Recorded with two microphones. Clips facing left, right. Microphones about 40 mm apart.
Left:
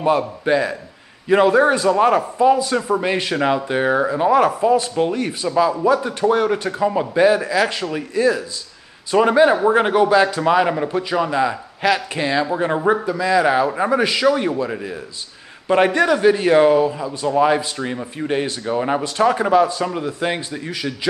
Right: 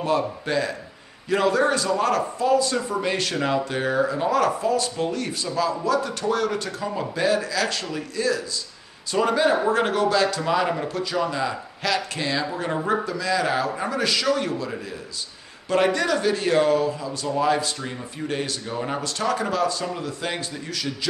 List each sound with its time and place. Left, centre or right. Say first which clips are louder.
0.5 s a man's voice: left 11 dB; left